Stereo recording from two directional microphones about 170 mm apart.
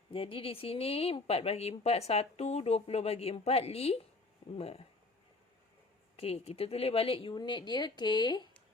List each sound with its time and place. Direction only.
0.1 s a woman's voice: 30° left (ahead or behind)
6.1 s speech: 35° left (ahead or behind)